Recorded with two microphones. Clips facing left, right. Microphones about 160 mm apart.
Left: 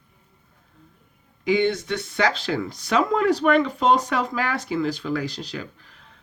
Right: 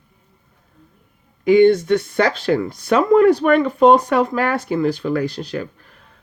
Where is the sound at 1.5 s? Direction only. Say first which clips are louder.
Right 10 dB; 50° right (ahead or behind).